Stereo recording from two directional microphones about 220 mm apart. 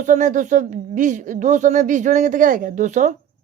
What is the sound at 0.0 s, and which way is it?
A woman's voice, 35° right (ahead or behind).